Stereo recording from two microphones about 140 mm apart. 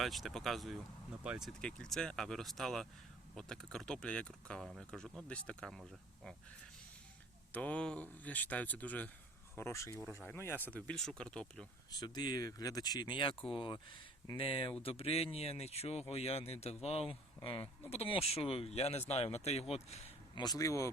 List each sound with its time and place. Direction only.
0.0 s speech: centre (ahead or behind)
7.5 s speech: 10° left (ahead or behind)
11.9 s speech: 30° left (ahead or behind); by 20.1 s 50° left (ahead or behind)
20.3 s speech: 30° left (ahead or behind)